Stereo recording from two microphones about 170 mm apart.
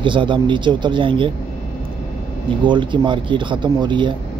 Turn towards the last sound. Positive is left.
turn(degrees=-30)  # may be behind; listen again after turning